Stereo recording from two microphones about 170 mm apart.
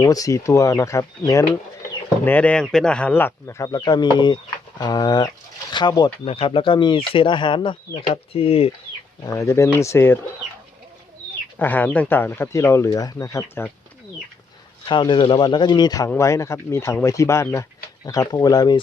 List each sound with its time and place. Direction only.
0.0 s speech: 20° left (ahead or behind); by 8.7 s 35° left (ahead or behind)
9.2 s speech: 20° left (ahead or behind)
11.6 s speech: 10° left (ahead or behind)
14.8 s speech: 25° left (ahead or behind)